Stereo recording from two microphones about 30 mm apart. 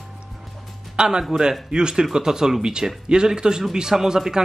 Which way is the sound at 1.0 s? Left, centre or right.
Right.